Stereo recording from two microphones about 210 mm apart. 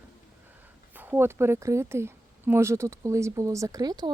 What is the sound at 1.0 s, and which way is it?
A woman's voice, 10° right (ahead or behind).